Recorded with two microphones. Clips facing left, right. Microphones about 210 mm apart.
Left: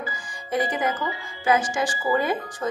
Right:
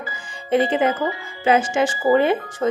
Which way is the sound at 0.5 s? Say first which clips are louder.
Right 7 dB; 25° right (ahead or behind).